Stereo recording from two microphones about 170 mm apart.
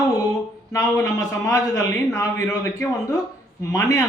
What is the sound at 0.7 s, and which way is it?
A man's voice, 20° left (ahead or behind).